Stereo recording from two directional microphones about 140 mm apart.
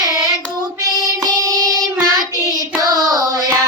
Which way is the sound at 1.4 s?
25° right (ahead or behind).